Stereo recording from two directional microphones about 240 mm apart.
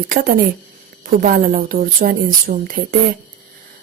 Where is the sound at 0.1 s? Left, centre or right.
Right.